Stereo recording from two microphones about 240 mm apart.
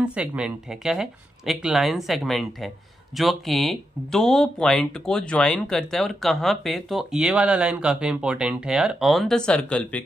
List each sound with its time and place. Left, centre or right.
0.0 s speech: centre